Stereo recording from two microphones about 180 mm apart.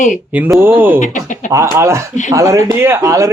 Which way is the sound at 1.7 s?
15° right (ahead or behind).